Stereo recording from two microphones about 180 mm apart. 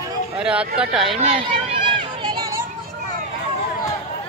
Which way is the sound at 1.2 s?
30° right (ahead or behind).